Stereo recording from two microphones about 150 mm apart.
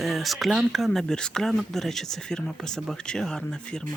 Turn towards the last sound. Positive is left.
turn(degrees=5)  # may be behind; listen again after turning